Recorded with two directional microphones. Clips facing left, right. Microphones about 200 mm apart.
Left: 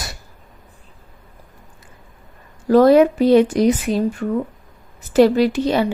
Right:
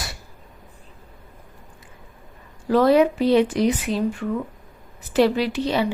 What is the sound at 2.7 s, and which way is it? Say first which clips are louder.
Speech: left 5 dB; 45° left (ahead or behind).